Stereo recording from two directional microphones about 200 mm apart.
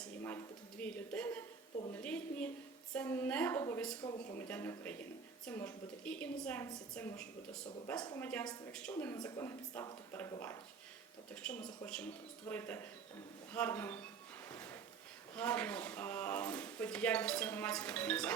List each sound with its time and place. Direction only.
0.2 s speech: 10° left (ahead or behind)
4.0 s speech: 25° left (ahead or behind)
4.4 s speech: 10° left (ahead or behind)
7.9 s speech: 20° left (ahead or behind)
8.2 s speech: 10° left (ahead or behind)
11.4 s speech: 5° left (ahead or behind)
14.5 s a sound: 10° left (ahead or behind)
15.4 s speech: 5° left (ahead or behind)